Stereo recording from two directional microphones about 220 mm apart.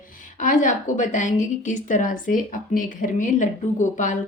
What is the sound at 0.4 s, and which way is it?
A woman's voice, 35° left (ahead or behind).